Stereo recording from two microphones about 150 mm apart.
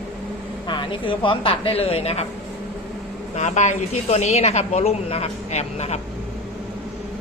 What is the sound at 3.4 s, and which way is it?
Speech, 50° left (ahead or behind).